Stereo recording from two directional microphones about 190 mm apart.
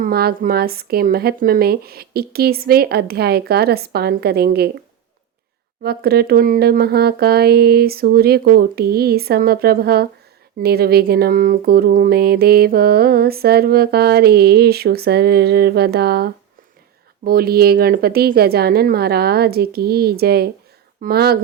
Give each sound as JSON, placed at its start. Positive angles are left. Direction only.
{"t": 0.0, "sound": "speech", "side_deg": -55}
{"t": 5.8, "sound": "speech", "side_deg": -55}